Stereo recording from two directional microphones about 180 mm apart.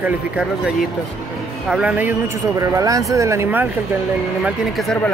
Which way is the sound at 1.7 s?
5° right (ahead or behind).